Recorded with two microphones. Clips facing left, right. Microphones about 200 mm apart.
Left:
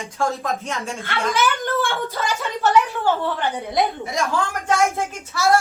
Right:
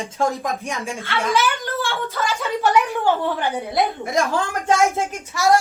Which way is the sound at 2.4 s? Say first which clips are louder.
Even; 10° right (ahead or behind).